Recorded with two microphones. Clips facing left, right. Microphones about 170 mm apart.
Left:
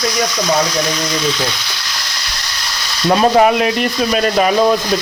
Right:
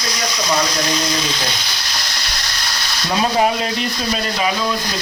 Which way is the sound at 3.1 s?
60° left (ahead or behind).